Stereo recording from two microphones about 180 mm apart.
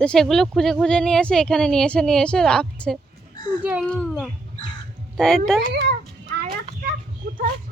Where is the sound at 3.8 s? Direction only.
5° left (ahead or behind).